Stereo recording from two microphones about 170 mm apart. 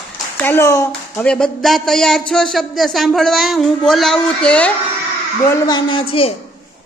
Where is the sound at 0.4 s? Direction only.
15° left (ahead or behind).